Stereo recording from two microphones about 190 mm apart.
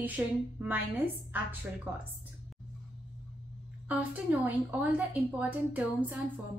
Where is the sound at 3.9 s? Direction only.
10° right (ahead or behind).